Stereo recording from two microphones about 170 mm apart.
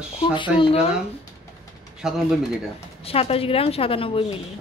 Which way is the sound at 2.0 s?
Centre (ahead or behind).